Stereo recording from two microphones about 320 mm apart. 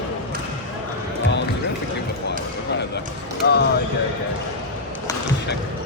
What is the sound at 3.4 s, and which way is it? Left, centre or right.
Speech, left.